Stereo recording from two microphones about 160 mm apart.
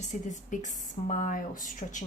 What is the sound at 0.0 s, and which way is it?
Speech, 50° left (ahead or behind).